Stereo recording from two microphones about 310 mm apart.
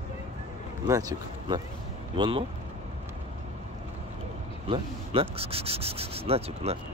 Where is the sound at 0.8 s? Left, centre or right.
Centre.